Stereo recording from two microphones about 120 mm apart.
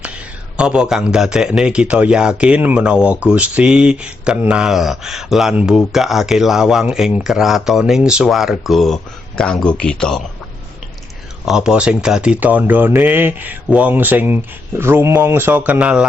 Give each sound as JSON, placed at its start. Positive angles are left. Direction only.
{"t": 0.0, "sound": "speech", "side_deg": -10}
{"t": 11.4, "sound": "speech", "side_deg": -5}